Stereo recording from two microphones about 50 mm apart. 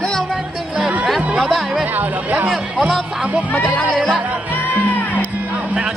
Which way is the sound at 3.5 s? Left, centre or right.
Left.